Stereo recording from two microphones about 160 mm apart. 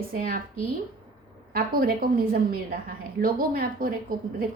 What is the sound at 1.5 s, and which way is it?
Speech, 65° right (ahead or behind).